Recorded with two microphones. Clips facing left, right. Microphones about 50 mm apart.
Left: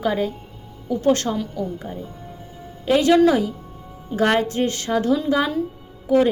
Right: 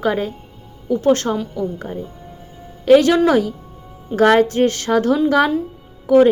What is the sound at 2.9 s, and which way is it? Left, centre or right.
Speech, right.